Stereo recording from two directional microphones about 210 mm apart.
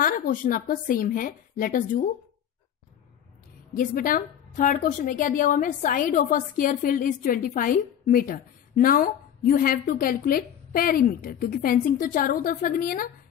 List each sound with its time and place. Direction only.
0.0 s a woman's voice: 40° left (ahead or behind)
3.7 s a woman's voice: 40° left (ahead or behind)